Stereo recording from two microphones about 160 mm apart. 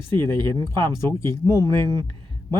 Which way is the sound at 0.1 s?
15° left (ahead or behind).